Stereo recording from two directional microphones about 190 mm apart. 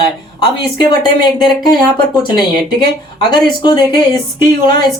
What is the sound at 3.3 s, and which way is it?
Speech, 25° left (ahead or behind).